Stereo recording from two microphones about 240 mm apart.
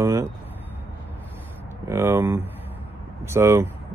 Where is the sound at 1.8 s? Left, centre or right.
Centre.